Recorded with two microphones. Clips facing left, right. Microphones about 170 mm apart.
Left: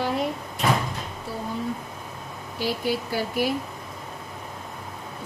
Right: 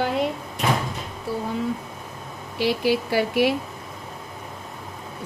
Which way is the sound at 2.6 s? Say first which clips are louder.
Right 5 dB; 70° right (ahead or behind).